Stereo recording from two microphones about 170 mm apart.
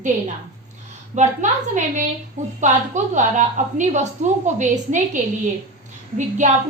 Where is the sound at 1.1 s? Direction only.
45° right (ahead or behind).